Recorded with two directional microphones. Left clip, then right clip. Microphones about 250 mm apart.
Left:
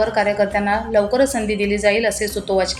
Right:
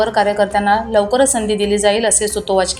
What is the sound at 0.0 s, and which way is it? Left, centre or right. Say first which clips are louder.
A woman's voice: right 3 dB; centre.